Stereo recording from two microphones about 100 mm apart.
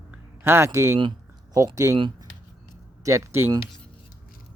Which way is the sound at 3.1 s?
30° right (ahead or behind).